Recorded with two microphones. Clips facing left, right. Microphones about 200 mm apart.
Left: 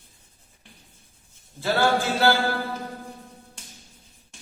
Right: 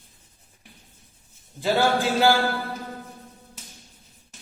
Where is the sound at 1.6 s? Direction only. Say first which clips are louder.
Right 1 dB; 15° right (ahead or behind).